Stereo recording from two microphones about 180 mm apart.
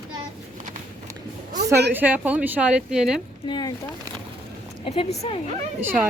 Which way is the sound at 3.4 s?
25° left (ahead or behind).